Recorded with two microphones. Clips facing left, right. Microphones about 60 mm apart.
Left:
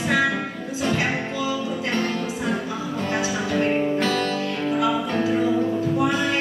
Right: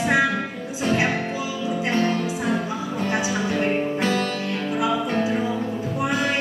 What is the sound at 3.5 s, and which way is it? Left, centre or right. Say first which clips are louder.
Music: left 4 dB; centre.